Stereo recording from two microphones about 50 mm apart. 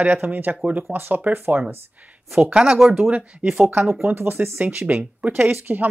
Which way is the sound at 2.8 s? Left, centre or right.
Centre.